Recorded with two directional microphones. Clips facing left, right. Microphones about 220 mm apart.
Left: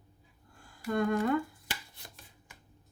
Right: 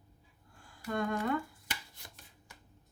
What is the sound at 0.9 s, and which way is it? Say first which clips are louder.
Speech: left 5 dB; 45° left (ahead or behind).